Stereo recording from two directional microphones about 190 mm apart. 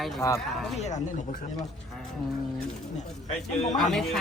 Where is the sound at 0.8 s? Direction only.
40° left (ahead or behind).